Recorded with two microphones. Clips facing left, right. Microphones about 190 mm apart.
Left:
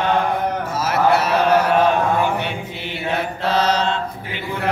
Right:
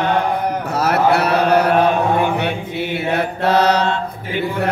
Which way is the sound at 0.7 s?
65° right (ahead or behind).